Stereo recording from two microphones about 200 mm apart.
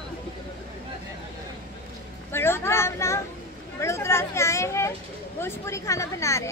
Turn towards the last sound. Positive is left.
turn(degrees=15)  # may be behind; listen again after turning